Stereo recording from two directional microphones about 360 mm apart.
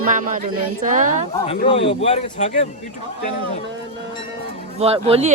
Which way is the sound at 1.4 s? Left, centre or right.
Centre.